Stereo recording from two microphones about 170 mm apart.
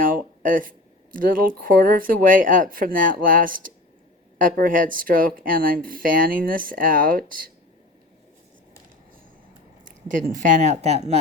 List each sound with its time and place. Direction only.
0.0 s a sound: 55° right (ahead or behind)
1.1 s speech: 55° right (ahead or behind)
10.1 s speech: 50° right (ahead or behind)